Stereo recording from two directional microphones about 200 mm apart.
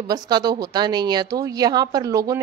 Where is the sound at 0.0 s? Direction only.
20° right (ahead or behind).